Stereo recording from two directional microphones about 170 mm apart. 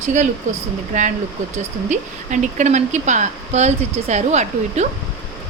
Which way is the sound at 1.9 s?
45° right (ahead or behind).